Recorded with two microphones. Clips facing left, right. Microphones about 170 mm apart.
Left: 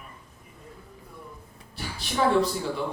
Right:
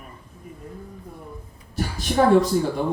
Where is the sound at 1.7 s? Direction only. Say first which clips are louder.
Right 9 dB; 45° right (ahead or behind).